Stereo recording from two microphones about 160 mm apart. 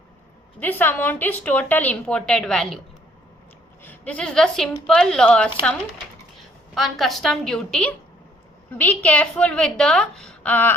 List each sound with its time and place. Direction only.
0.6 s a woman's voice: 10° left (ahead or behind)
3.8 s speech: 10° left (ahead or behind)
6.7 s a woman's voice: centre (ahead or behind)